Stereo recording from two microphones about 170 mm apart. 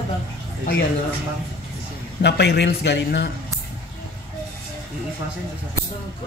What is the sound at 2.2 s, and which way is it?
A man's voice, 85° left.